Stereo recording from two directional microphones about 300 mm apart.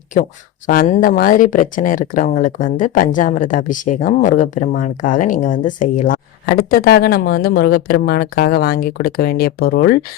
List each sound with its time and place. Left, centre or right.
0.7 s speech: left